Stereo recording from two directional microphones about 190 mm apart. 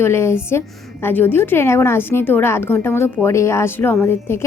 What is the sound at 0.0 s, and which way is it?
A woman's voice, 15° left (ahead or behind).